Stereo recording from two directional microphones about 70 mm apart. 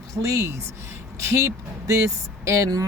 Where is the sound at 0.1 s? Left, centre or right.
Right.